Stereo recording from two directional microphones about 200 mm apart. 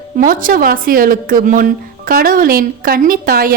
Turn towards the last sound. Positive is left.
turn(degrees=-45)  # may be behind; listen again after turning